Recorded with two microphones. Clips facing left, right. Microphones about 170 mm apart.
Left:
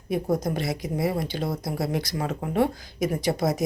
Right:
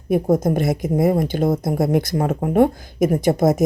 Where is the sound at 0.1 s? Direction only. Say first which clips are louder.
Right 8 dB; 50° right (ahead or behind).